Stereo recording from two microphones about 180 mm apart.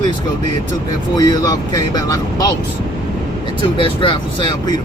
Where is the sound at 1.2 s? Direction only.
20° left (ahead or behind).